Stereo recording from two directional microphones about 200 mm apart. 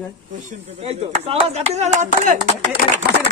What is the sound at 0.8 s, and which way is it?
Speech, 30° right (ahead or behind).